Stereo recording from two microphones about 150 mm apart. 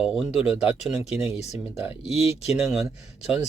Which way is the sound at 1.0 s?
45° left (ahead or behind).